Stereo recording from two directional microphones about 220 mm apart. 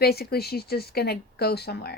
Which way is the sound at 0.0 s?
45° left (ahead or behind).